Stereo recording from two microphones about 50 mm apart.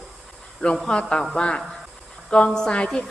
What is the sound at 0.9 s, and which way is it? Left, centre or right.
A woman's voice, centre.